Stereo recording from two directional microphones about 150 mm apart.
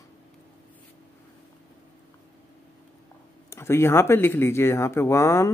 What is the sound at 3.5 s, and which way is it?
Speech, 15° left (ahead or behind).